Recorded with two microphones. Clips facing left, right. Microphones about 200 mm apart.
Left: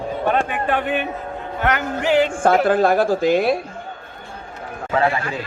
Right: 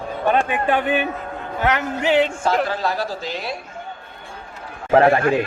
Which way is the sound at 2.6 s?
50° left (ahead or behind).